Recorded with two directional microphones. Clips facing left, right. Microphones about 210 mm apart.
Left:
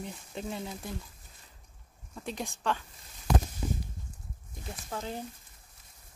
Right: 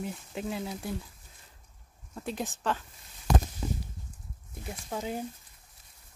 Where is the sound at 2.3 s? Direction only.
5° right (ahead or behind).